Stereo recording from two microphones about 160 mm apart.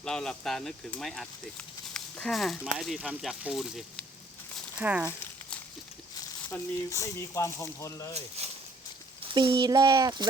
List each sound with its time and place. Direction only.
0.0 s speech: 5° left (ahead or behind)
6.5 s speech: 20° left (ahead or behind)
8.4 s speech: 40° right (ahead or behind)
9.3 s a child's voice: 25° right (ahead or behind)